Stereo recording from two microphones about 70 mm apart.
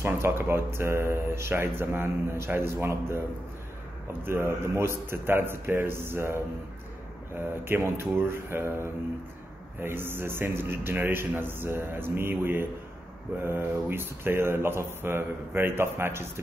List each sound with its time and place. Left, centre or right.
0.0 s a man's voice: right
4.2 s a man's voice: right